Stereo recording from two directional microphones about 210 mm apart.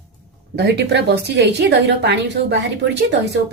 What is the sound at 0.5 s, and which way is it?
A woman's voice, 50° right (ahead or behind).